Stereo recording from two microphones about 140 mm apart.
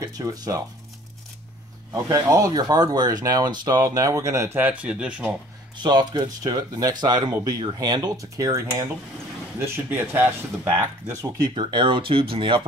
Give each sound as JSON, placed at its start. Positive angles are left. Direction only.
{"t": 0.0, "sound": "speech", "side_deg": -25}
{"t": 1.9, "sound": "speech", "side_deg": -25}
{"t": 5.8, "sound": "speech", "side_deg": -30}
{"t": 11.5, "sound": "speech", "side_deg": -35}